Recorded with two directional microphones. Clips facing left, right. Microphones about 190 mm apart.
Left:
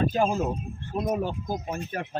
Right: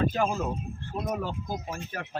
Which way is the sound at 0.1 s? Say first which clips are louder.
Left 3 dB; 20° left (ahead or behind).